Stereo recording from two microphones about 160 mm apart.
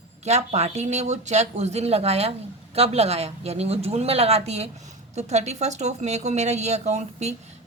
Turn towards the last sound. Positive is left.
turn(degrees=-45)  # may be behind; listen again after turning